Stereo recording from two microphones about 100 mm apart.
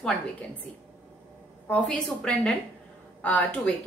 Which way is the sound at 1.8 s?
10° left (ahead or behind).